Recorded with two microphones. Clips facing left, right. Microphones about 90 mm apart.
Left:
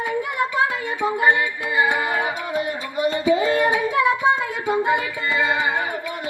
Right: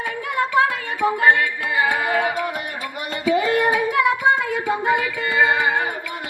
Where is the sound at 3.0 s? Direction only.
20° left (ahead or behind).